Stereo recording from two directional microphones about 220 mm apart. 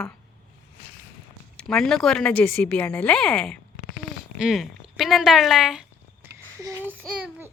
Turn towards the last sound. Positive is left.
turn(degrees=-10)  # may be behind; listen again after turning